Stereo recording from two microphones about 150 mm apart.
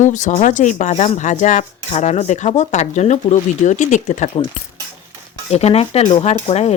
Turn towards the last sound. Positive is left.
turn(degrees=45)  # may be behind; listen again after turning